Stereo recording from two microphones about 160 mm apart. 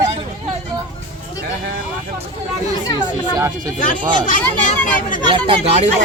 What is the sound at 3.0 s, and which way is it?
Speech, 25° right (ahead or behind).